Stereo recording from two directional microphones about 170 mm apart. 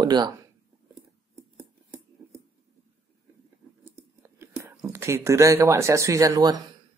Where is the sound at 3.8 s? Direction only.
15° right (ahead or behind).